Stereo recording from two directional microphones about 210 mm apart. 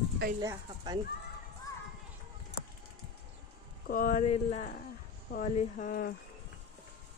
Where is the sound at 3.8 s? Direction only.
45° left (ahead or behind).